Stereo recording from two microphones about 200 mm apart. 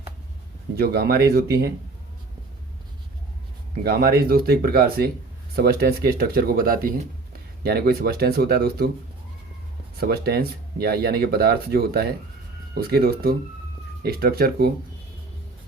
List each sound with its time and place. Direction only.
0.8 s speech: 50° right (ahead or behind)
3.8 s speech: 50° right (ahead or behind)
10.0 s speech: 50° right (ahead or behind)